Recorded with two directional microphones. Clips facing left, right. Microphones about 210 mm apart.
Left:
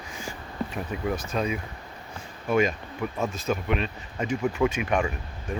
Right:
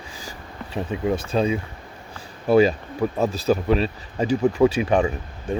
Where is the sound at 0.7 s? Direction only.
25° right (ahead or behind).